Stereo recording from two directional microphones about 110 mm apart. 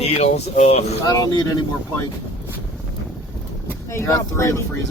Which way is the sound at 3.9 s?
25° left (ahead or behind).